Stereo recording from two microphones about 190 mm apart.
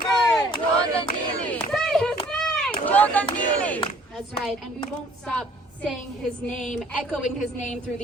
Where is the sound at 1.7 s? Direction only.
Centre (ahead or behind).